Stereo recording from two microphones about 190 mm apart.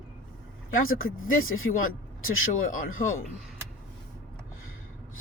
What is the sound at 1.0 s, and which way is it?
Speech, 90° left.